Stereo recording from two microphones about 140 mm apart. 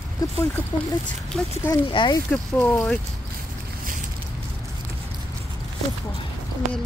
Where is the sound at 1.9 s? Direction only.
35° left (ahead or behind).